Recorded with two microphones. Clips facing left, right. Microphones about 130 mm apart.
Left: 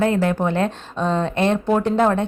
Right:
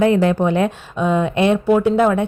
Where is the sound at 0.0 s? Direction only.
20° right (ahead or behind).